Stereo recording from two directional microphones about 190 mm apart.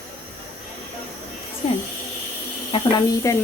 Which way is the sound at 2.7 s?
20° left (ahead or behind).